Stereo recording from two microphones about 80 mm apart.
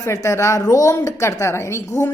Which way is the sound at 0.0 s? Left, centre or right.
Left.